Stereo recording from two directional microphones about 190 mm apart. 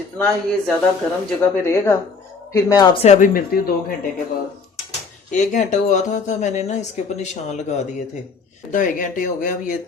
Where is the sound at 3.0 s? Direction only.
45° left (ahead or behind).